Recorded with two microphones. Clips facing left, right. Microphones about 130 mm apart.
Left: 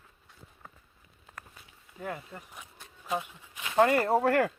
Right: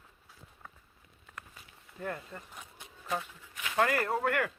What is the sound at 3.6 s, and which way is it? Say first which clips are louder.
Speech: left 5 dB; 25° left (ahead or behind).